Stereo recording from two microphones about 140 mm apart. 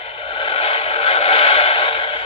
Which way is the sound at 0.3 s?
40° left (ahead or behind).